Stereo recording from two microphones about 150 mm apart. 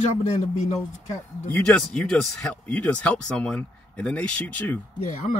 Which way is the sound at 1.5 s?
5° left (ahead or behind).